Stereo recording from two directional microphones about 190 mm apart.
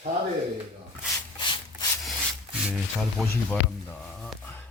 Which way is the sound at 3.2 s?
5° left (ahead or behind).